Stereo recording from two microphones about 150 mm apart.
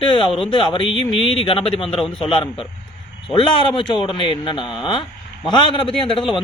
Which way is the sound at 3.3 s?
35° left (ahead or behind).